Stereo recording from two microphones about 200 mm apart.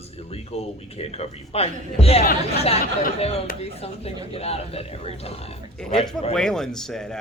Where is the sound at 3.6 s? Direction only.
30° left (ahead or behind).